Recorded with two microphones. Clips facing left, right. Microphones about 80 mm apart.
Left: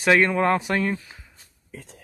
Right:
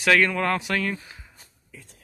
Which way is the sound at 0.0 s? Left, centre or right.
Left.